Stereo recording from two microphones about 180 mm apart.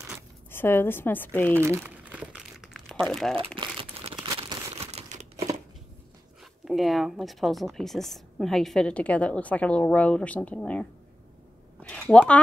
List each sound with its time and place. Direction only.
0.5 s speech: 15° left (ahead or behind)
1.5 s crumpling: 15° right (ahead or behind); by 3.3 s centre (ahead or behind)
3.5 s crumpling: 25° right (ahead or behind)
4.7 s crumpling: 35° right (ahead or behind)
6.6 s speech: centre (ahead or behind)
11.9 s speech: 5° left (ahead or behind)